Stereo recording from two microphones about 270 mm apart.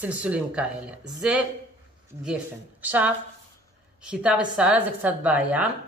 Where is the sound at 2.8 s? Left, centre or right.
Centre.